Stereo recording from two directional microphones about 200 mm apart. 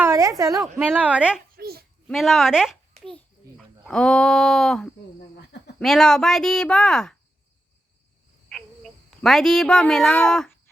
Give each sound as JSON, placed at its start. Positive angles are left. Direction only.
{"t": 0.0, "sound": "a sound", "side_deg": -15}
{"t": 0.9, "sound": "speech", "side_deg": -5}
{"t": 1.5, "sound": "babbling", "side_deg": -50}
{"t": 2.0, "sound": "a child's voice", "side_deg": 0}
{"t": 8.4, "sound": "speech", "side_deg": 5}